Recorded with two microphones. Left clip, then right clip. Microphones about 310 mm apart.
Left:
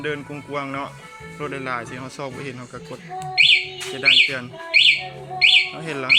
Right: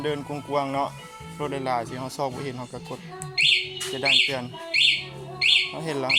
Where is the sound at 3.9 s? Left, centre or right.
Right.